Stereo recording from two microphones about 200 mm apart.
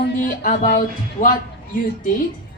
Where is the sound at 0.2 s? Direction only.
40° left (ahead or behind).